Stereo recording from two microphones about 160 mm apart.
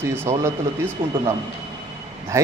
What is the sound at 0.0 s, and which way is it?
Speech, 15° right (ahead or behind).